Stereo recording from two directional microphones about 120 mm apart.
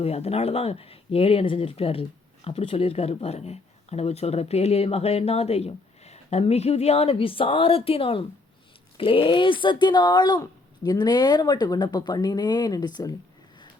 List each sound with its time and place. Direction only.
0.0 s speech: 55° left (ahead or behind); by 13.1 s 35° left (ahead or behind)